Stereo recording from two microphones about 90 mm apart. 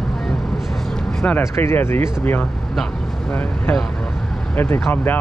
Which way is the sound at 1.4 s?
25° left (ahead or behind).